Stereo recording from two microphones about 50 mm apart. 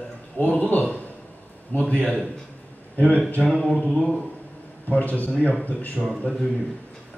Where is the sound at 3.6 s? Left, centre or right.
Centre.